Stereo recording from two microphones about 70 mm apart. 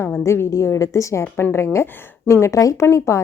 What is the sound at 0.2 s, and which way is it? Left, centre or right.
A woman's voice, left.